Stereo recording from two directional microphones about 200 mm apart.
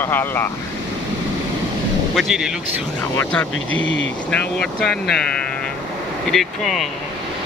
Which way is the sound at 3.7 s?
70° left (ahead or behind).